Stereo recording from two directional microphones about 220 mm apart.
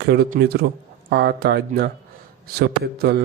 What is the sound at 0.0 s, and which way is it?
Speech, 45° right (ahead or behind).